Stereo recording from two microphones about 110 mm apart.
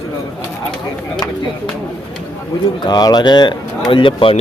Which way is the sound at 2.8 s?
40° left (ahead or behind).